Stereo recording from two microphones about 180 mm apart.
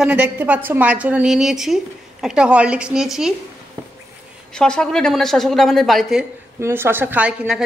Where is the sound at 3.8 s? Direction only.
15° right (ahead or behind).